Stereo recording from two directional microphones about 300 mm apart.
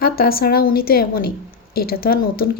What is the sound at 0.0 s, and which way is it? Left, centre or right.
A woman's voice, left.